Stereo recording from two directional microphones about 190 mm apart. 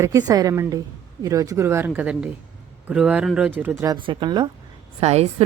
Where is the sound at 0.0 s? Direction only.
20° right (ahead or behind).